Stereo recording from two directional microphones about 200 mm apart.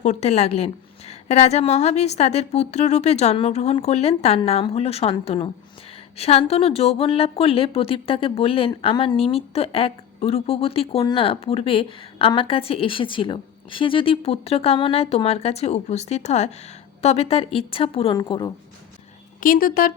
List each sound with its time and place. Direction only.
0.0 s a woman's voice: 35° left (ahead or behind)
19.4 s speech: 45° left (ahead or behind)